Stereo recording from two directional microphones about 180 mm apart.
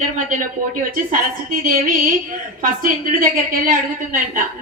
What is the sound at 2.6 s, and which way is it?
A woman's voice, 50° right (ahead or behind).